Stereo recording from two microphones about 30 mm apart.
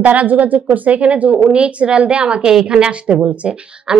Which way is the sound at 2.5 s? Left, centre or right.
Right.